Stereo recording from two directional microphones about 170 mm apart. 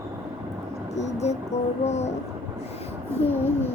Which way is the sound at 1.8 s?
40° left (ahead or behind).